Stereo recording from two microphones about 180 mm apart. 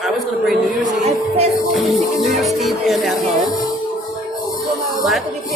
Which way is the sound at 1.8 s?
Centre (ahead or behind).